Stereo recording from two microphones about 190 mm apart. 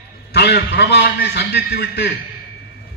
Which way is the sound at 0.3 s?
60° left (ahead or behind).